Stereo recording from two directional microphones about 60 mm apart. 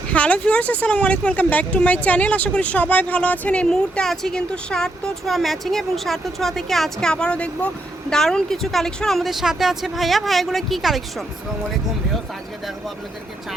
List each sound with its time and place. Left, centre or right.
0.1 s speech: centre
4.0 s a woman's voice: centre
7.1 s a woman's voice: centre